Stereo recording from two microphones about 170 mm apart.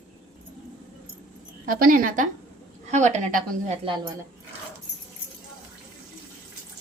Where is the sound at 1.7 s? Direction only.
55° right (ahead or behind).